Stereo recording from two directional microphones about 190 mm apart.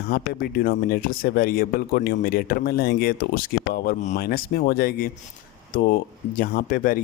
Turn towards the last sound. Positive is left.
turn(degrees=50)  # may be behind; listen again after turning